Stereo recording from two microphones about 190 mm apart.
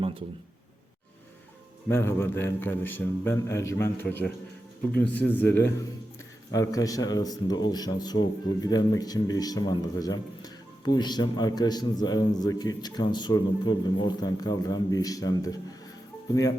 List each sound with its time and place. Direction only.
1.9 s a man's voice: 10° left (ahead or behind)
4.9 s a man's voice: 10° left (ahead or behind)